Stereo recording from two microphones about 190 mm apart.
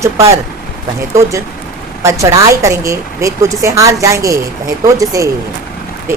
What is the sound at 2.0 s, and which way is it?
A woman's voice, 15° right (ahead or behind).